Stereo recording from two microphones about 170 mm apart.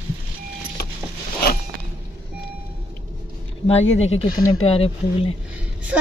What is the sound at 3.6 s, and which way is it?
Speech, 40° left (ahead or behind).